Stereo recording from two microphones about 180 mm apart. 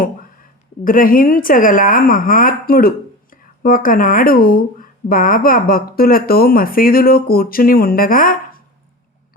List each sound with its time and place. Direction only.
0.9 s a woman's voice: 50° left (ahead or behind)